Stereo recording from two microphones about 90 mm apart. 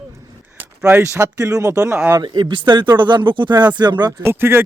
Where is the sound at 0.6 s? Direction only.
20° right (ahead or behind).